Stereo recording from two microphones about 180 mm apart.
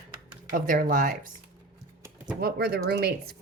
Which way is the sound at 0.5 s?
50° right (ahead or behind).